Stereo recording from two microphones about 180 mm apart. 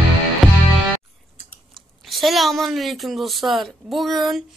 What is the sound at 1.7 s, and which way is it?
Speech, centre (ahead or behind).